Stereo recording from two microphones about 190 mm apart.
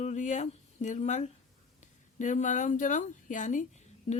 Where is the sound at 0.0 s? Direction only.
40° left (ahead or behind).